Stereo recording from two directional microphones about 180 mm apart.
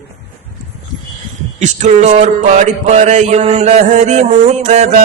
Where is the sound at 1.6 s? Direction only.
40° right (ahead or behind).